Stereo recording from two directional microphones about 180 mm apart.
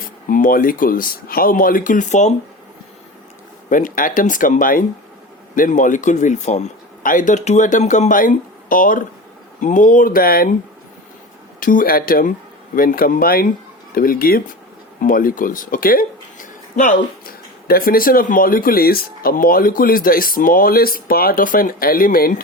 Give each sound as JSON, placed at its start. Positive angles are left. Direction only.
{"t": 0.3, "sound": "speech", "side_deg": 50}
{"t": 3.7, "sound": "speech", "side_deg": 50}
{"t": 11.6, "sound": "speech", "side_deg": 50}